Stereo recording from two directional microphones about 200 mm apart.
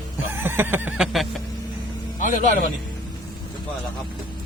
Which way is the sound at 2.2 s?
40° left (ahead or behind).